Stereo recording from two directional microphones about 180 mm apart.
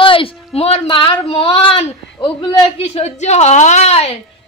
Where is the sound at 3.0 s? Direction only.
40° left (ahead or behind).